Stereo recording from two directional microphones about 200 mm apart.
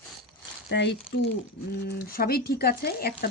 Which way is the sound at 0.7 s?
60° left (ahead or behind).